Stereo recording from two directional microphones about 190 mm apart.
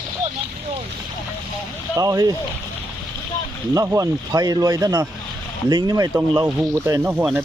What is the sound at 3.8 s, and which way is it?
Speech, 15° right (ahead or behind).